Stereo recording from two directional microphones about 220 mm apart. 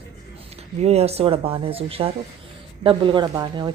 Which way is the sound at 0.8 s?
30° right (ahead or behind).